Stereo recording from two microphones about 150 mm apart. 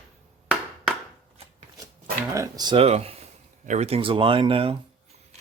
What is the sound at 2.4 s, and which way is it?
Speech, 25° right (ahead or behind).